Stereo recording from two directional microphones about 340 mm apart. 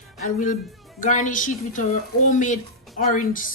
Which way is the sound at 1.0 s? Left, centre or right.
Left.